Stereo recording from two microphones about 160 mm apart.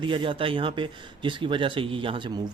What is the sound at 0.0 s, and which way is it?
Speech, 30° right (ahead or behind).